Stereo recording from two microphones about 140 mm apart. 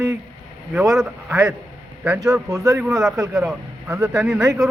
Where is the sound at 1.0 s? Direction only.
15° right (ahead or behind).